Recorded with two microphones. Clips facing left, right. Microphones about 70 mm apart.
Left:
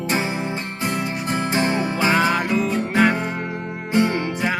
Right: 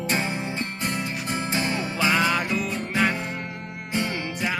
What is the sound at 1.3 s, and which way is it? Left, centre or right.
Music, left.